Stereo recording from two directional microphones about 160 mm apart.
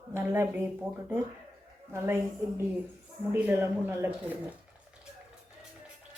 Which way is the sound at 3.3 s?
15° right (ahead or behind).